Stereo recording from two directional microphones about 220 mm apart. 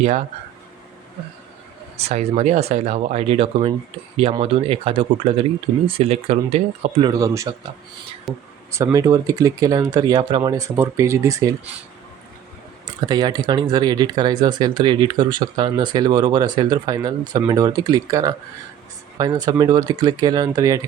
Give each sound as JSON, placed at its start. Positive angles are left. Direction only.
{"t": 2.0, "sound": "speech", "side_deg": -30}
{"t": 8.3, "sound": "speech", "side_deg": 0}
{"t": 8.7, "sound": "speech", "side_deg": -15}
{"t": 13.1, "sound": "speech", "side_deg": -20}